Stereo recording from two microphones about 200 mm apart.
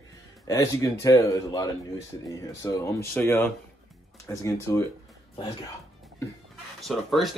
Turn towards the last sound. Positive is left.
turn(degrees=0)  # may be behind; listen again after turning